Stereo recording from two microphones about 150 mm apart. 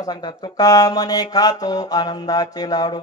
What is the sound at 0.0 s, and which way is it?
Mantra, 25° left (ahead or behind).